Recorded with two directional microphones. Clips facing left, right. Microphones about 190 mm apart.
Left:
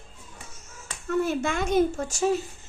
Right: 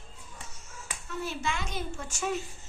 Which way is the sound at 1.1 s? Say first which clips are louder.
Left 9 dB; 50° left (ahead or behind).